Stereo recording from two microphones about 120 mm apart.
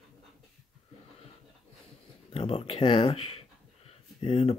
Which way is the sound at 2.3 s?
55° left (ahead or behind).